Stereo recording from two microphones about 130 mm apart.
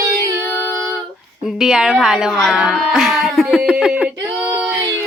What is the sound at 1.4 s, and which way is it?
Speech, 5° right (ahead or behind).